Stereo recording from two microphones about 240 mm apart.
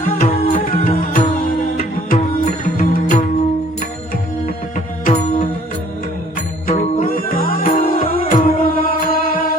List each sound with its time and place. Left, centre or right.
0.2 s music: left
5.0 s music: left
6.7 s music: left